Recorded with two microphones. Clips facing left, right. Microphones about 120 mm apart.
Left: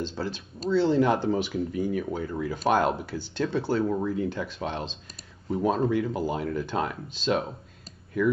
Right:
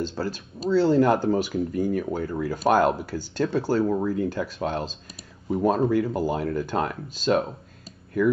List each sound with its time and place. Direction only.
0.0 s speech: 5° right (ahead or behind)